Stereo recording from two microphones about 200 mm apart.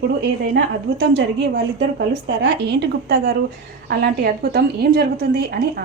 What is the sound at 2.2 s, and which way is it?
A woman's voice, 55° right (ahead or behind).